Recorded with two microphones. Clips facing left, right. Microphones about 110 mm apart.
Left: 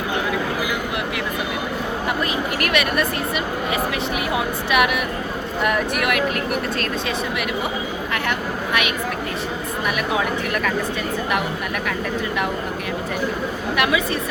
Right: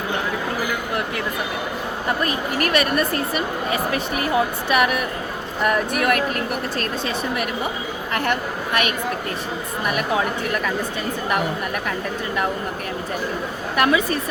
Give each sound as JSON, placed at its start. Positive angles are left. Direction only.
{"t": 2.2, "sound": "speech", "side_deg": -35}
{"t": 4.7, "sound": "speech", "side_deg": -40}
{"t": 8.3, "sound": "a woman's voice", "side_deg": -40}
{"t": 13.7, "sound": "speech", "side_deg": -40}